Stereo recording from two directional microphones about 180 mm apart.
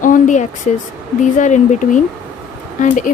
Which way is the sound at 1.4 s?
40° left (ahead or behind).